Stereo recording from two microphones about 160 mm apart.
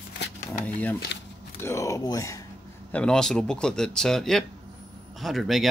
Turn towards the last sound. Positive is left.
turn(degrees=0)  # may be behind; listen again after turning